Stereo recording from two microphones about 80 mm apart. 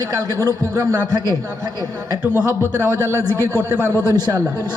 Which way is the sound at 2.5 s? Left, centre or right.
Right.